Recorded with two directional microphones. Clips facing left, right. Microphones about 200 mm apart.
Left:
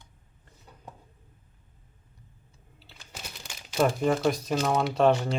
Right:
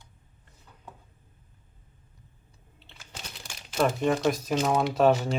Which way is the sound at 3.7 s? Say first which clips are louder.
Left 1 dB; centre (ahead or behind).